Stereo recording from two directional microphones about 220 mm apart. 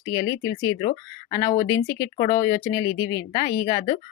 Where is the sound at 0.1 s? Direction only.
15° left (ahead or behind).